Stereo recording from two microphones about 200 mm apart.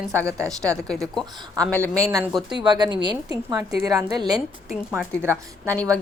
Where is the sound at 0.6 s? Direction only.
5° left (ahead or behind).